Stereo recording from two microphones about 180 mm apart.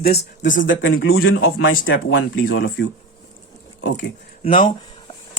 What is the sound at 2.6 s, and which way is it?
Speech, 60° left (ahead or behind).